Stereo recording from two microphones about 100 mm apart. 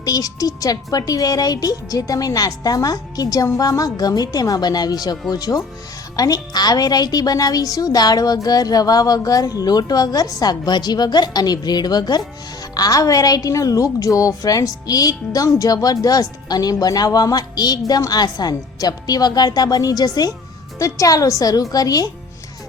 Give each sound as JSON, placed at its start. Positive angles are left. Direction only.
{"t": 0.0, "sound": "a woman's voice", "side_deg": 40}